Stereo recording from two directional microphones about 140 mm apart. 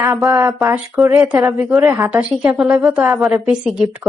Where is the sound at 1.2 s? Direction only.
15° right (ahead or behind).